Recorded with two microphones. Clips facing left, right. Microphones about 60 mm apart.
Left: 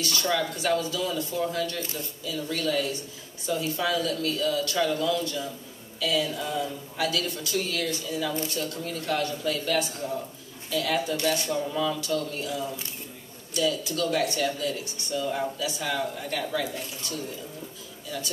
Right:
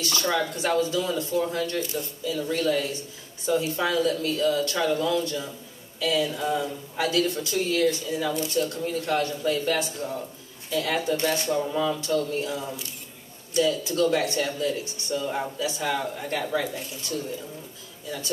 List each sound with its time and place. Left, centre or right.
0.0 s speech: right
1.4 s speech: centre
11.5 s speech: centre